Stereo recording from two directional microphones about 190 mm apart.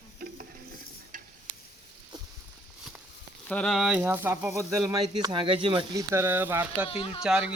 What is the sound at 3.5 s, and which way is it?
Speech, 5° left (ahead or behind).